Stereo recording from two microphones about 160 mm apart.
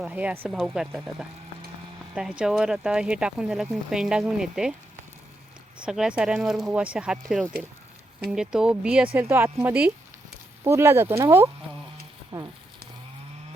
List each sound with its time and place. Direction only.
0.0 s speech: 10° right (ahead or behind)
5.8 s speech: 5° right (ahead or behind)
12.3 s a sound: 30° right (ahead or behind)